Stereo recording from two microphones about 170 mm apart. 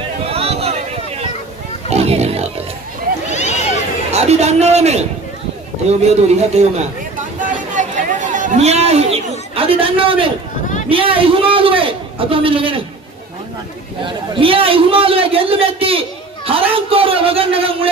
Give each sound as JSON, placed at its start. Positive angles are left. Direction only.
{"t": 0.2, "sound": "a sound", "side_deg": -35}
{"t": 1.9, "sound": "a man's voice", "side_deg": -40}
{"t": 3.3, "sound": "a sound", "side_deg": 40}
{"t": 4.1, "sound": "a man's voice", "side_deg": -40}
{"t": 7.3, "sound": "chatter", "side_deg": -50}
{"t": 10.9, "sound": "a man's voice", "side_deg": -30}
{"t": 14.0, "sound": "a man's voice", "side_deg": -30}